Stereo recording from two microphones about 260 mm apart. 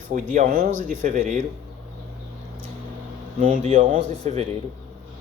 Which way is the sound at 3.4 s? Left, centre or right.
Right.